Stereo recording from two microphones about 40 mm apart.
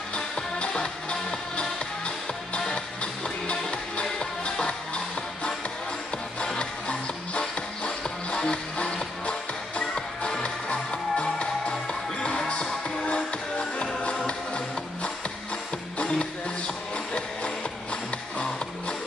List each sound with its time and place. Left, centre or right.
0.7 s music: centre
16.0 s music: left